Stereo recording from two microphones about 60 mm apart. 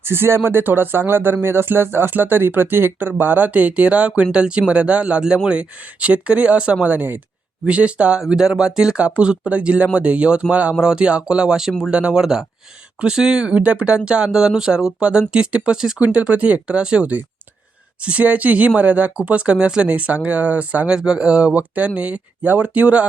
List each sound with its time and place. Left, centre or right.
0.0 s speech: right; by 12.2 s centre
12.2 s speech: centre; by 20.9 s right
20.9 s speech: centre